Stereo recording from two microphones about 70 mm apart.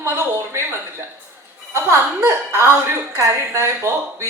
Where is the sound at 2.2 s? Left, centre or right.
Right.